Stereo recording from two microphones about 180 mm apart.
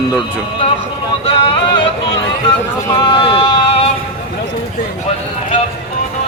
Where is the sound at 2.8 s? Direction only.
25° left (ahead or behind).